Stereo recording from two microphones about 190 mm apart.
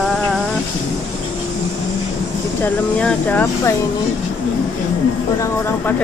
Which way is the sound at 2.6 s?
5° left (ahead or behind).